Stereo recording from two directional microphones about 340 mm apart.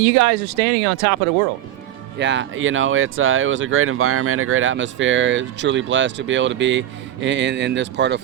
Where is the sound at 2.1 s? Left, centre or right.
Right.